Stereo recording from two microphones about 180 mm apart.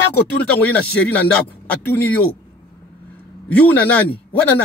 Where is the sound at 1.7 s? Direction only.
10° left (ahead or behind).